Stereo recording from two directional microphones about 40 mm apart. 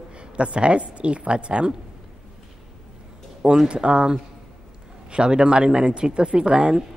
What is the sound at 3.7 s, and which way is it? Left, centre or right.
Speech, right.